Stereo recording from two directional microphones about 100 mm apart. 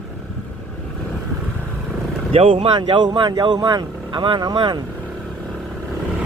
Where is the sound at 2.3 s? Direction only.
70° right (ahead or behind); by 4.8 s 50° right (ahead or behind).